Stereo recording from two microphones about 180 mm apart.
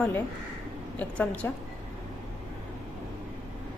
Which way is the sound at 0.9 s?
10° left (ahead or behind).